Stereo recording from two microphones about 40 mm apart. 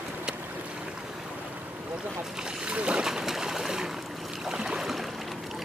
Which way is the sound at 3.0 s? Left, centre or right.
Centre.